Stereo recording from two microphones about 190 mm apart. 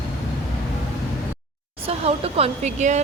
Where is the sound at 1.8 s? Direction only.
30° right (ahead or behind).